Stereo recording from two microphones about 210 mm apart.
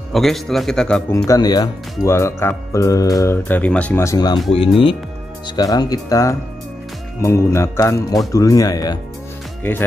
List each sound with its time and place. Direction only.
0.1 s a man's voice: centre (ahead or behind)
1.1 s speech: 15° left (ahead or behind)